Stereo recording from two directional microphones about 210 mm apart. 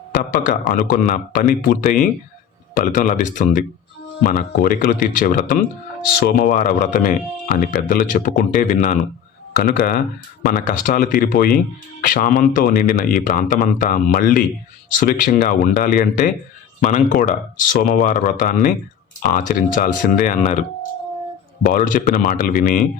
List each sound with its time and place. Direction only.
0.1 s speech: 40° left (ahead or behind)
21.6 s speech: 45° left (ahead or behind)